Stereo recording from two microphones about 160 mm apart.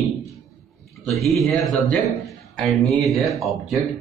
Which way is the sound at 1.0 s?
Centre (ahead or behind).